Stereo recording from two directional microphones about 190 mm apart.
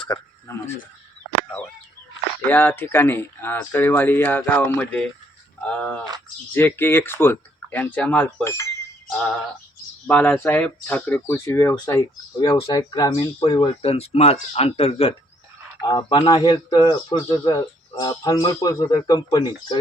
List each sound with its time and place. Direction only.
0.0 s a sound: 25° left (ahead or behind)
1.5 s speech: 5° left (ahead or behind)
10.1 s speech: 10° left (ahead or behind)